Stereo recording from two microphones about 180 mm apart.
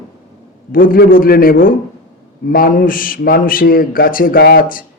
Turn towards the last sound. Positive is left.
turn(degrees=50)  # may be behind; listen again after turning